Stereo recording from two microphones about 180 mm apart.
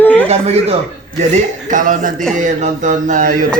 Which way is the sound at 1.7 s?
45° right (ahead or behind).